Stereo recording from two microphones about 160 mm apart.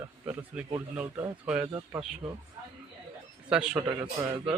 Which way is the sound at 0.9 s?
15° right (ahead or behind).